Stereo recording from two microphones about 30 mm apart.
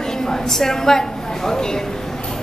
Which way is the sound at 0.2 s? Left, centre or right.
Centre.